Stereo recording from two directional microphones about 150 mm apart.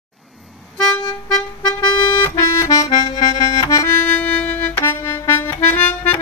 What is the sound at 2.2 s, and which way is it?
Accordion, 20° left (ahead or behind).